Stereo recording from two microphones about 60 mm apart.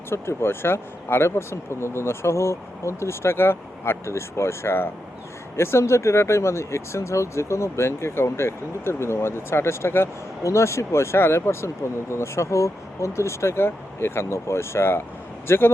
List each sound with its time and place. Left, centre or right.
0.1 s a man's voice: left